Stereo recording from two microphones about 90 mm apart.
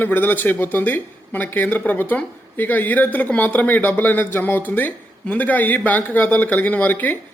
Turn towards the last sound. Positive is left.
turn(degrees=20)  # may be behind; listen again after turning